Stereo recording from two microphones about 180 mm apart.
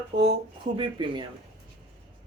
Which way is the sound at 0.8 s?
25° right (ahead or behind).